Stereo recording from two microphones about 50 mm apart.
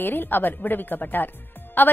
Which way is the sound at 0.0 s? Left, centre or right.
Left.